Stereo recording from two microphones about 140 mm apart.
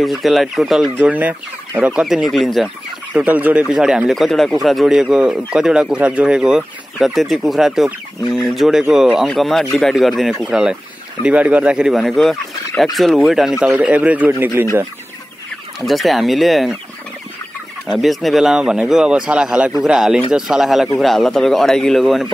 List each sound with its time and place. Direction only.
0.0 s speech: centre (ahead or behind)
3.1 s speech: 10° right (ahead or behind)
15.8 s speech: centre (ahead or behind)
17.9 s speech: centre (ahead or behind)